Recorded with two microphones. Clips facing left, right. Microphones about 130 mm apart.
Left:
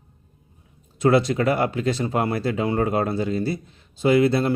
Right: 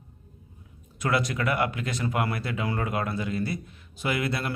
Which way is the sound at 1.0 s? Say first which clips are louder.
Left 8 dB; 30° left (ahead or behind).